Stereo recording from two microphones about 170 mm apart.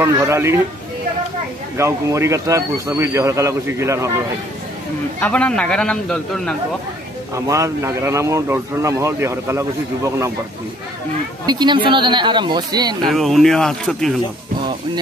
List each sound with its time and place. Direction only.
0.0 s speech: 15° right (ahead or behind)
1.8 s speech: 15° right (ahead or behind)
5.2 s a man's voice: 5° left (ahead or behind)
7.3 s speech: 20° right (ahead or behind)
11.4 s speech: 25° right (ahead or behind)
13.1 s a man's voice: centre (ahead or behind)